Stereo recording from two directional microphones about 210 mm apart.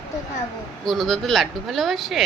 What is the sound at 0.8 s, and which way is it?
Speech, centre (ahead or behind).